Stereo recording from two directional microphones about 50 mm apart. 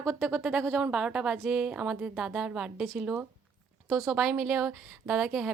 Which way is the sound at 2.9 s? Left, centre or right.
Right.